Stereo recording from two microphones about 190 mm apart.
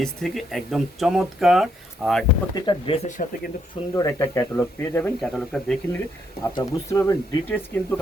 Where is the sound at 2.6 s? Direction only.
25° left (ahead or behind).